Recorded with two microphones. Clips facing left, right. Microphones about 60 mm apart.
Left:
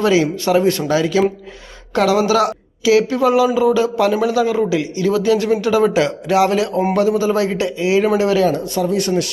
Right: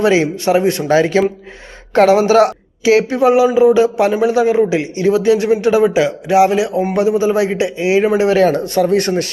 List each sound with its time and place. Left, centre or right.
0.0 s speech: right
0.9 s a woman's voice: right
3.0 s speech: right
5.8 s a man's voice: centre
8.3 s speech: right